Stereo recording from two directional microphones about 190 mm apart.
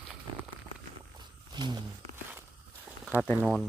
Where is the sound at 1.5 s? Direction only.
20° right (ahead or behind).